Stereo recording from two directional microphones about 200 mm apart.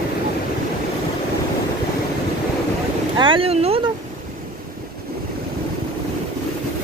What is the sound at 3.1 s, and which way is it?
Speech, 25° right (ahead or behind).